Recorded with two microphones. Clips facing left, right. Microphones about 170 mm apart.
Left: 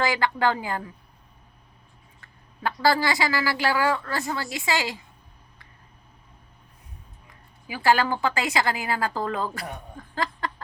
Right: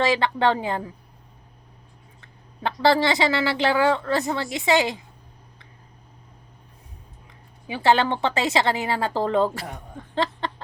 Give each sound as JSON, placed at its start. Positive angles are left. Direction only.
{"t": 0.0, "sound": "a woman's voice", "side_deg": -25}
{"t": 2.2, "sound": "a woman's voice", "side_deg": -25}
{"t": 7.7, "sound": "a woman's voice", "side_deg": -25}